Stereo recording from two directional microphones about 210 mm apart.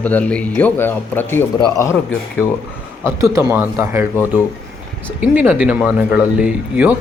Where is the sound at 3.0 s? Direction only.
15° right (ahead or behind).